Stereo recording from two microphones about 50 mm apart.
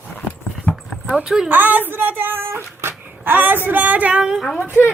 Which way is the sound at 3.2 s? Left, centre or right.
Right.